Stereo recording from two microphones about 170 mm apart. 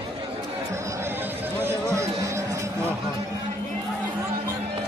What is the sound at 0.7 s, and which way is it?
Music, 15° right (ahead or behind).